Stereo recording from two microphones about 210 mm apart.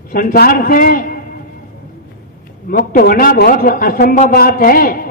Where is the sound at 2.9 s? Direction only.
45° left (ahead or behind).